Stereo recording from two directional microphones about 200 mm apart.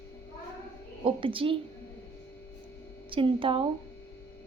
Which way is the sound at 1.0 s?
25° right (ahead or behind).